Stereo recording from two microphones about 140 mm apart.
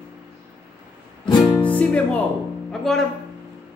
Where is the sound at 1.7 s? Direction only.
10° left (ahead or behind).